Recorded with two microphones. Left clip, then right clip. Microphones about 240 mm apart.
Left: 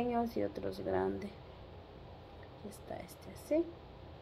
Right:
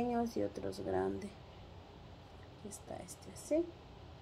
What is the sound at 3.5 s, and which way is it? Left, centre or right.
Speech, centre.